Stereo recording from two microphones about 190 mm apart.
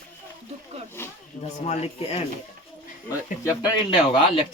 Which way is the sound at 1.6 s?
35° left (ahead or behind).